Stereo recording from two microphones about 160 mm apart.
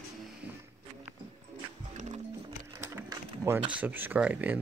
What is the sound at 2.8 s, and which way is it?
Mechanisms, 15° right (ahead or behind).